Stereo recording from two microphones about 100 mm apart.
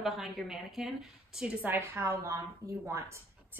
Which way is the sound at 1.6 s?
25° right (ahead or behind).